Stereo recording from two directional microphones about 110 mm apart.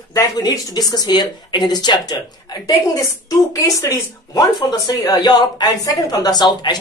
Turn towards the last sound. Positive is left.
turn(degrees=40)  # may be behind; listen again after turning